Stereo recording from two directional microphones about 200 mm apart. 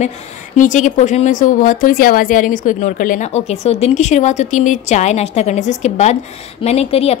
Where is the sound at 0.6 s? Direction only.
40° left (ahead or behind).